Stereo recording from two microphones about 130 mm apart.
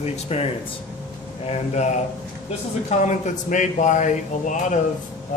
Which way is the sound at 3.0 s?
70° left (ahead or behind).